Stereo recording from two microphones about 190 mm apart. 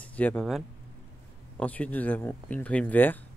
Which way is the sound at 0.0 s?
10° left (ahead or behind).